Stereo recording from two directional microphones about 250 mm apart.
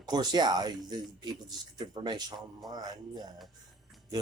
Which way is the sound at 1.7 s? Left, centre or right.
Centre.